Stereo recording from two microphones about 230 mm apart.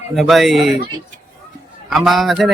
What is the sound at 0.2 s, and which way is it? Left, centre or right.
Speech, centre.